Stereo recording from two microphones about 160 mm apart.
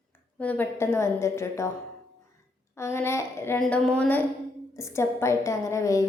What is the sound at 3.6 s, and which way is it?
A woman's voice, 5° left (ahead or behind).